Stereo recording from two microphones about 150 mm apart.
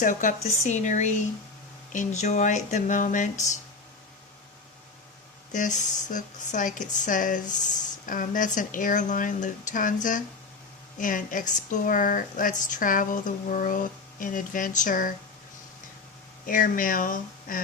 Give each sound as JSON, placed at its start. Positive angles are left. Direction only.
{"t": 0.0, "sound": "speech", "side_deg": 60}
{"t": 5.5, "sound": "speech", "side_deg": 55}
{"t": 16.5, "sound": "speech", "side_deg": 65}